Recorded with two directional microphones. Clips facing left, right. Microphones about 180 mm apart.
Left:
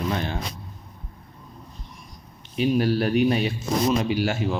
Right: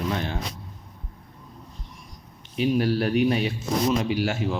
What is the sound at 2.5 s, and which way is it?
Speech, 40° left (ahead or behind).